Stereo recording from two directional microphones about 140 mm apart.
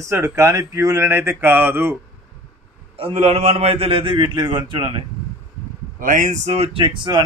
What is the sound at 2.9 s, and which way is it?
A man's voice, 45° right (ahead or behind).